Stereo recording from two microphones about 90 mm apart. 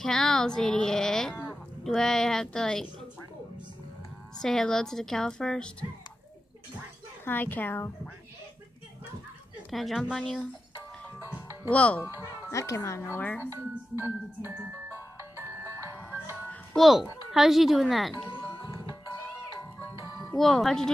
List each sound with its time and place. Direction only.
0.0 s a woman's voice: 5° left (ahead or behind)
4.4 s a woman's voice: 5° left (ahead or behind)
7.2 s a woman's voice: 20° left (ahead or behind)
9.7 s speech: centre (ahead or behind)
11.1 s music: 20° right (ahead or behind)
11.7 s a woman's voice: 15° left (ahead or behind)
12.4 s speech: 35° left (ahead or behind)
13.2 s a woman's voice: 20° left (ahead or behind)
13.5 s music: 25° right (ahead or behind)
16.7 s speech: centre (ahead or behind)
20.3 s speech: centre (ahead or behind)